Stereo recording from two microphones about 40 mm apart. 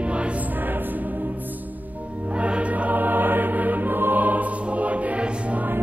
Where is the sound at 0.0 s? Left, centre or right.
Right.